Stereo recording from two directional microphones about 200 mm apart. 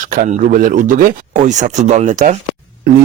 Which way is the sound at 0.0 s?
40° right (ahead or behind).